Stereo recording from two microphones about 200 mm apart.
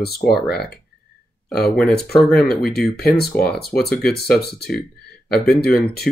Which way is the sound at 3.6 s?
Centre (ahead or behind).